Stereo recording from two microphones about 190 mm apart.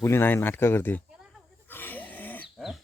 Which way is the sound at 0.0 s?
10° left (ahead or behind).